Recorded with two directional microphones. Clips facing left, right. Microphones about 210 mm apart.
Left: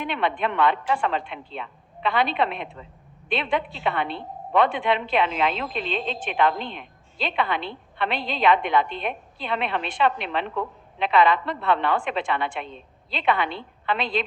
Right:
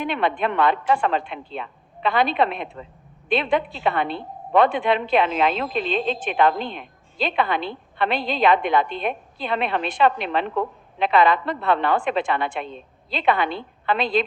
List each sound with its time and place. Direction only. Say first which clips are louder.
0.0 s a woman's voice: right 3 dB; 40° right (ahead or behind)